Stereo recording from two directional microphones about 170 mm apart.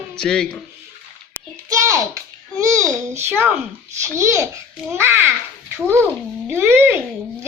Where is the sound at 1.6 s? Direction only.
20° right (ahead or behind).